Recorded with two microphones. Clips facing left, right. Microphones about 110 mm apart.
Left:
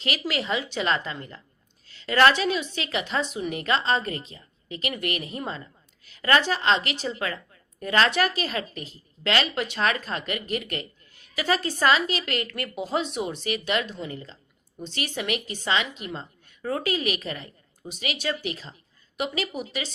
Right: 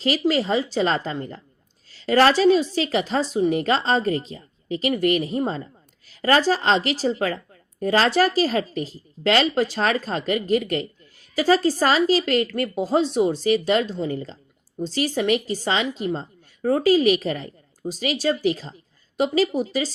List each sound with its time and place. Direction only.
0.0 s a woman's voice: 35° right (ahead or behind)